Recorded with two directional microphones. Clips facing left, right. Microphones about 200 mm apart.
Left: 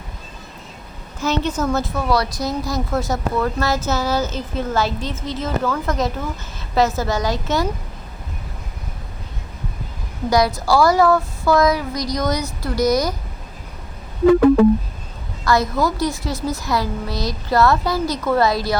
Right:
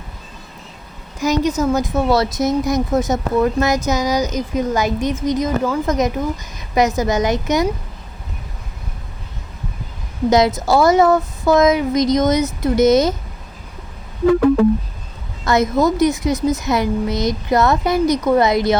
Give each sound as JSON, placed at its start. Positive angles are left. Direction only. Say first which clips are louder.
{"t": 1.5, "sound": "a woman's voice", "louder": "right 4 dB", "side_deg": -10}
{"t": 2.0, "sound": "a woman's voice", "louder": "right 4 dB", "side_deg": -25}
{"t": 10.2, "sound": "a woman's voice", "louder": "right 3 dB", "side_deg": -20}
{"t": 15.4, "sound": "a woman's voice", "louder": "right 3 dB", "side_deg": -20}